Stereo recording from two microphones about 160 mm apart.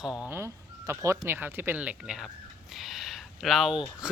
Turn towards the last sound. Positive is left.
turn(degrees=0)  # may be behind; listen again after turning